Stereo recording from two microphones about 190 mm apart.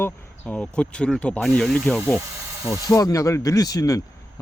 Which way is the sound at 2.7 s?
15° left (ahead or behind).